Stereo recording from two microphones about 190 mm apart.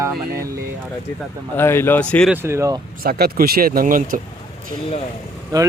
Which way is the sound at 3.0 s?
55° right (ahead or behind).